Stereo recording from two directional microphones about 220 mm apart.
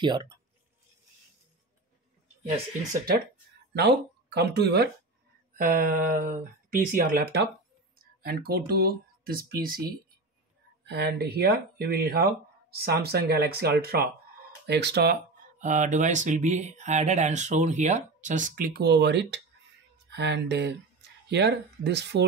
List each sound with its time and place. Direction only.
0.0 s speech: 20° right (ahead or behind)
3.7 s speech: 50° right (ahead or behind)
10.9 s speech: 50° right (ahead or behind)
15.6 s speech: 35° right (ahead or behind); by 22.2 s 50° right (ahead or behind)